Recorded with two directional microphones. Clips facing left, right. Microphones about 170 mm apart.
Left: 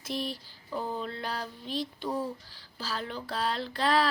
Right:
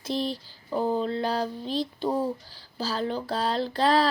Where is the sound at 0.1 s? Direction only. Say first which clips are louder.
Right 6 dB; 25° right (ahead or behind).